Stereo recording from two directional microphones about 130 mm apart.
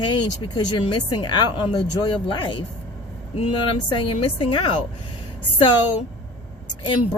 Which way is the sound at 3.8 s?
40° left (ahead or behind).